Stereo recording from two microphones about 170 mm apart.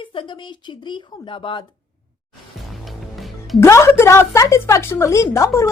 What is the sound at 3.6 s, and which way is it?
A woman's voice, 15° left (ahead or behind).